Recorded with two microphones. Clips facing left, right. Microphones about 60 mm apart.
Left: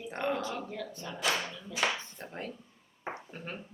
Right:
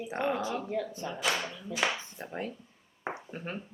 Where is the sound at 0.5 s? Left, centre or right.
Right.